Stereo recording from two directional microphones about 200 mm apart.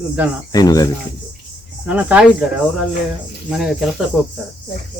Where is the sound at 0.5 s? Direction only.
20° left (ahead or behind).